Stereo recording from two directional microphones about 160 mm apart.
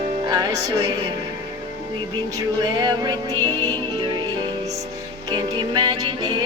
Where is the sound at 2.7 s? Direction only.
25° right (ahead or behind).